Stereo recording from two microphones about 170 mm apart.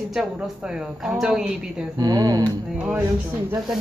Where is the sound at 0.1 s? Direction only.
5° right (ahead or behind).